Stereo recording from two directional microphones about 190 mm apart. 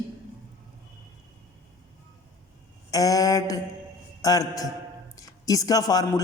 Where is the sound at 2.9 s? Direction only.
20° left (ahead or behind).